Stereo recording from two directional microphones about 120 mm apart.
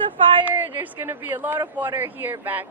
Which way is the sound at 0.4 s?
15° right (ahead or behind).